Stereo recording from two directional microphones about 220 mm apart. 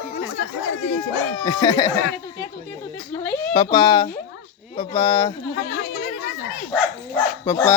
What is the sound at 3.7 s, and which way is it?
Speech, 20° left (ahead or behind).